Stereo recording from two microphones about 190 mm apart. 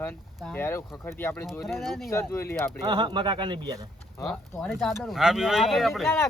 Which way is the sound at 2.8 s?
25° right (ahead or behind).